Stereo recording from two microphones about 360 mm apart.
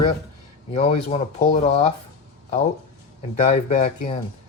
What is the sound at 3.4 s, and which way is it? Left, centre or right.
Speech, centre.